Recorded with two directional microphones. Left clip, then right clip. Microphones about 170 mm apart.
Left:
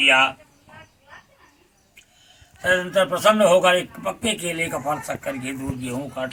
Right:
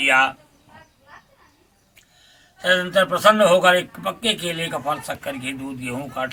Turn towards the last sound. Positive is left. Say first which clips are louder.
# right 2 dB
turn(degrees=-25)  # may be behind; listen again after turning